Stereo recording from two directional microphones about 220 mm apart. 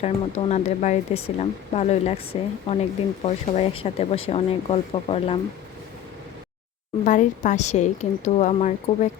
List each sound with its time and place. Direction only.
0.0 s speech: 30° left (ahead or behind)
7.0 s a woman's voice: 35° left (ahead or behind)